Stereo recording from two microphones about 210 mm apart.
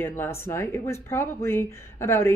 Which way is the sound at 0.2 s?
10° left (ahead or behind).